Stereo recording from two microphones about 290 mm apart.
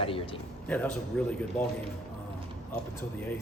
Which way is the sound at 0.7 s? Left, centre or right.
Centre.